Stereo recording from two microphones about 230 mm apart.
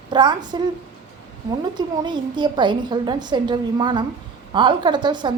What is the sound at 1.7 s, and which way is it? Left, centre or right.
A woman's voice, centre.